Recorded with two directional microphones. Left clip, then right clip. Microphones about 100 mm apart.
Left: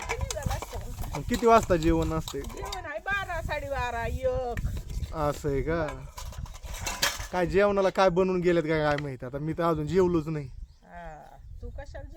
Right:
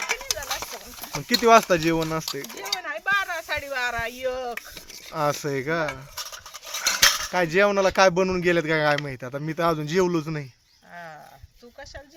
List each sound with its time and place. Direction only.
0.0 s clip-clop: 40° left (ahead or behind)
1.3 s speech: 20° right (ahead or behind)
2.5 s a sound: 35° left (ahead or behind)
5.1 s speech: 20° right (ahead or behind)
6.1 s cutlery: 50° left (ahead or behind)
7.3 s speech: 15° right (ahead or behind)